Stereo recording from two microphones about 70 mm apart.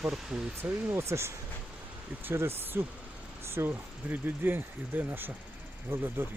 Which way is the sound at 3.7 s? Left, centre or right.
Right.